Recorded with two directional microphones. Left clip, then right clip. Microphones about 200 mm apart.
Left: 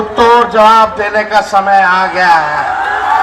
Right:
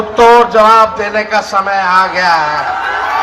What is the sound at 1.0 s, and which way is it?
Speech, 20° right (ahead or behind).